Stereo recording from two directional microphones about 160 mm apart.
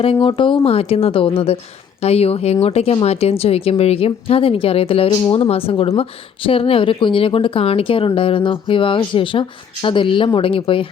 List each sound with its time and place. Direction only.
0.0 s speech: 35° left (ahead or behind)